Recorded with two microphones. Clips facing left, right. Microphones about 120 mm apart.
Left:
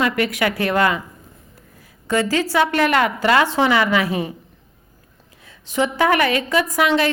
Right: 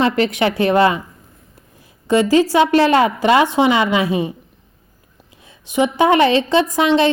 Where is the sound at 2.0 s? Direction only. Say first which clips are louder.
Right 6 dB; 20° right (ahead or behind).